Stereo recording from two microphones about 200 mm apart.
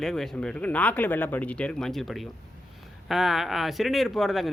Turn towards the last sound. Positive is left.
turn(degrees=0)  # may be behind; listen again after turning